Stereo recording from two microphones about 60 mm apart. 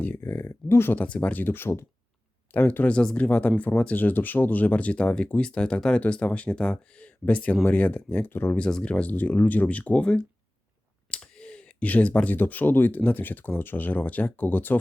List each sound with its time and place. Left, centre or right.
0.0 s speech: left
0.9 s speech: left
8.7 s speech: centre